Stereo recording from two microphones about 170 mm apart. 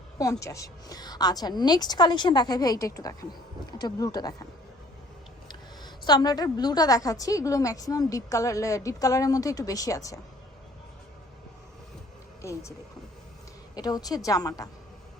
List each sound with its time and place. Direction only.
0.2 s a woman's voice: 20° left (ahead or behind)
5.5 s a woman's voice: 25° left (ahead or behind)
12.4 s speech: 15° left (ahead or behind)
13.7 s a woman's voice: 20° left (ahead or behind)